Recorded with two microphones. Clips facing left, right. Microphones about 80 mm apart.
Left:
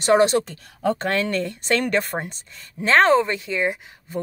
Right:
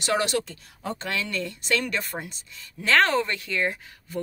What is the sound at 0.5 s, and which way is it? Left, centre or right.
Speech, left.